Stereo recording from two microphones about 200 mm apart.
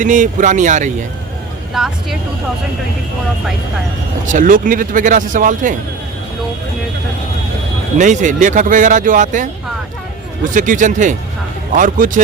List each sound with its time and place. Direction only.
0.0 s speech: 40° right (ahead or behind)
1.7 s speech: centre (ahead or behind)
4.3 s speech: 40° right (ahead or behind)
7.9 s speech: 40° right (ahead or behind)
10.5 s speech: 40° right (ahead or behind)